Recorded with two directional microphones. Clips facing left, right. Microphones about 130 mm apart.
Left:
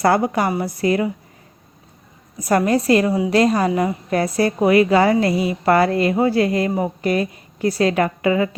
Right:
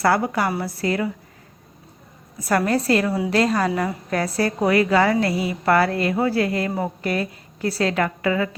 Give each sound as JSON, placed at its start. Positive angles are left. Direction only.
{"t": 0.0, "sound": "a woman's voice", "side_deg": 20}
{"t": 2.4, "sound": "a woman's voice", "side_deg": 20}